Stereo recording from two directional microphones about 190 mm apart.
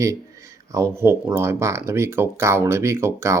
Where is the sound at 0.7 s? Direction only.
15° right (ahead or behind).